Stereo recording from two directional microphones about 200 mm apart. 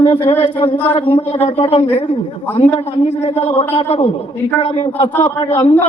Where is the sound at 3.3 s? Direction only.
20° left (ahead or behind).